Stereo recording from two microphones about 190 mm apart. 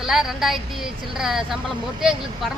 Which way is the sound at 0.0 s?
Centre (ahead or behind).